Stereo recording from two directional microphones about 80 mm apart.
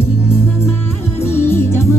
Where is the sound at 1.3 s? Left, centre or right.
Left.